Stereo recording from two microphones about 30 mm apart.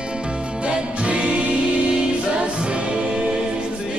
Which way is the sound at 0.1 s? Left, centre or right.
Right.